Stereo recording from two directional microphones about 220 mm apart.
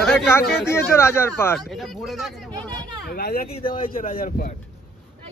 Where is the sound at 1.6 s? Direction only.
Centre (ahead or behind).